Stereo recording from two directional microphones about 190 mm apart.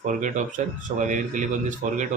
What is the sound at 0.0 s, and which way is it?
Speech, 40° right (ahead or behind).